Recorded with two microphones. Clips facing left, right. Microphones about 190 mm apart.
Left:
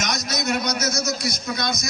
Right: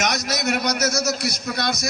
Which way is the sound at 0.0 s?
65° right (ahead or behind).